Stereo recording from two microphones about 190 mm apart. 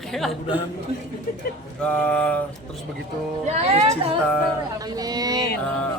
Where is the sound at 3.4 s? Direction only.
35° right (ahead or behind).